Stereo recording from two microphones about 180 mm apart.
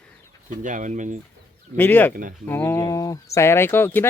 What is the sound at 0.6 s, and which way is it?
Speech, 45° right (ahead or behind).